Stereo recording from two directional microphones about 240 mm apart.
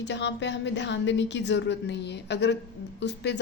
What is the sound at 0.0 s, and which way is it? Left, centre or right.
A woman's voice, left.